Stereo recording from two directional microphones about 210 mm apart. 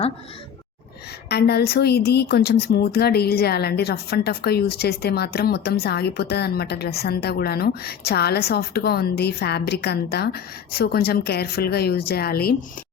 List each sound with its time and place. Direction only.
1.3 s a woman's voice: 50° left (ahead or behind)